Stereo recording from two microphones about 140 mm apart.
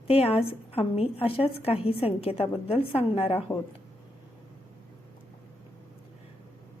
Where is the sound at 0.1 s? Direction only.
45° left (ahead or behind).